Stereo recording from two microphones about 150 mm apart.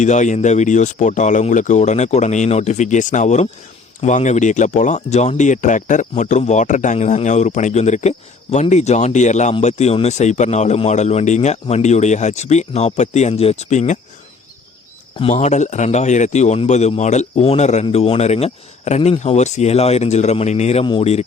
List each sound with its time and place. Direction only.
0.0 s speech: 55° left (ahead or behind)
15.2 s speech: 45° left (ahead or behind)